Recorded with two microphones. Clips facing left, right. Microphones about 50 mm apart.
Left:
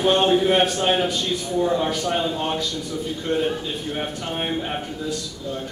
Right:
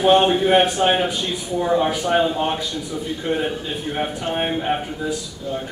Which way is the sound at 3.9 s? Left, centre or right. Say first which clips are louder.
Right 7 dB; centre.